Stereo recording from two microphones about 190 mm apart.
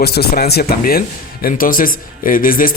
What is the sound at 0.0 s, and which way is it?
A man's voice, 55° left (ahead or behind).